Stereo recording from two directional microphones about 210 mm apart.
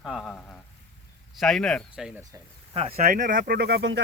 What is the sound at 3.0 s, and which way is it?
Speech, 40° right (ahead or behind).